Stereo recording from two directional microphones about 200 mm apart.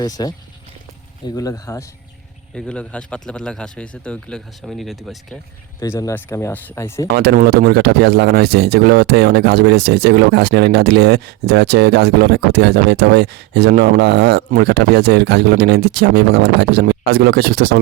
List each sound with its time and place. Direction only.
0.0 s speech: 20° left (ahead or behind)
1.4 s speech: 15° left (ahead or behind)
2.6 s speech: 5° left (ahead or behind)
5.8 s speech: 15° left (ahead or behind)
7.1 s speech: 55° right (ahead or behind)